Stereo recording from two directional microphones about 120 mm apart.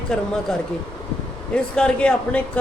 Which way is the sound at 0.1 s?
5° left (ahead or behind).